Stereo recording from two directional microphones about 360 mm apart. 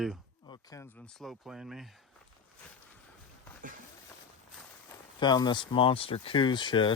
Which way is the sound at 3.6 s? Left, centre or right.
Right.